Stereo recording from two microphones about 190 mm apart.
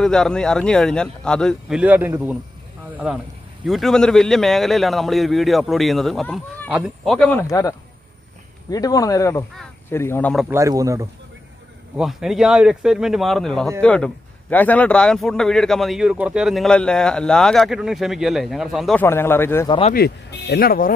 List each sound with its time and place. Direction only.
0.0 s a man's voice: 5° left (ahead or behind)
10.5 s speech: 15° right (ahead or behind)
12.0 s a man's voice: centre (ahead or behind)
19.0 s speech: 10° left (ahead or behind)
19.9 s speech: 55° left (ahead or behind)